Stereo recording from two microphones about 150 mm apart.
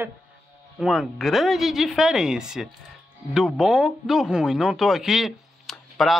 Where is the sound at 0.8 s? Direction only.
Centre (ahead or behind).